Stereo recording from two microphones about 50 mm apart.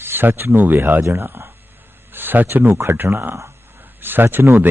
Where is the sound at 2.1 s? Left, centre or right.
Right.